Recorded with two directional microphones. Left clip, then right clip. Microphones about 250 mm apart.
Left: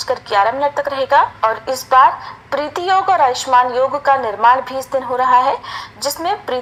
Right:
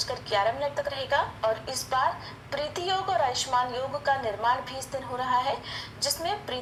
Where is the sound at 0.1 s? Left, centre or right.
Left.